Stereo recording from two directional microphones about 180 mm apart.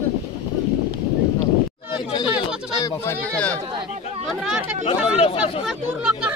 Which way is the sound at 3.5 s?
25° right (ahead or behind).